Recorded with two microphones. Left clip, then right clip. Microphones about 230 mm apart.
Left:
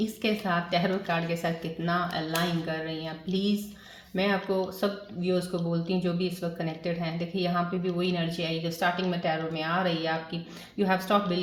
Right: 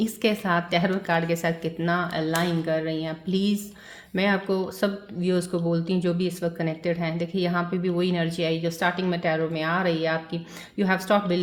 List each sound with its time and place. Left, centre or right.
0.0 s speech: right